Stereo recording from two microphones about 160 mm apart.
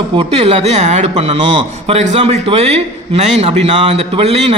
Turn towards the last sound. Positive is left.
turn(degrees=-40)  # may be behind; listen again after turning